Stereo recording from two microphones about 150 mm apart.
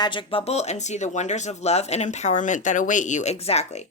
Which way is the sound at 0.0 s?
30° left (ahead or behind).